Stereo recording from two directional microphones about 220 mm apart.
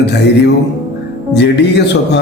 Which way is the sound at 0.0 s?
50° left (ahead or behind).